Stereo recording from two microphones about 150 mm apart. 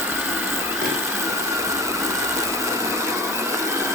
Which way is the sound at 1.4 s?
20° right (ahead or behind).